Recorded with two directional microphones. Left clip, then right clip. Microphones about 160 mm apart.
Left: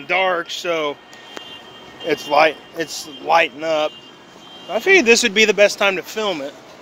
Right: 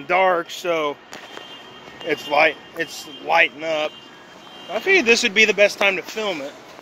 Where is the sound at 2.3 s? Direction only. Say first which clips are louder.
Left 2 dB; 20° left (ahead or behind).